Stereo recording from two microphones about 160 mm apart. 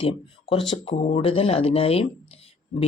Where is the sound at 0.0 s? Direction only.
35° left (ahead or behind).